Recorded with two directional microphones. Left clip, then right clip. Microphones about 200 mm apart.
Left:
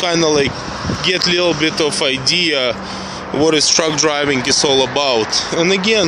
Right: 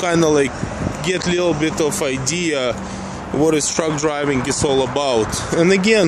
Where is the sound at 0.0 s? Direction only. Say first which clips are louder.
Left 1 dB; 20° right (ahead or behind).